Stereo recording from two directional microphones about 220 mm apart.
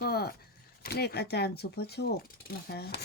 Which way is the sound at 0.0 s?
45° left (ahead or behind).